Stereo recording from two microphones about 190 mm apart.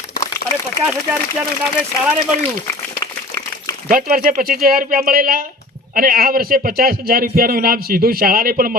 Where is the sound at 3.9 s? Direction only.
50° right (ahead or behind).